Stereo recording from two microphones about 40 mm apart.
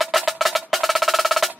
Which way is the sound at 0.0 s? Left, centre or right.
Centre.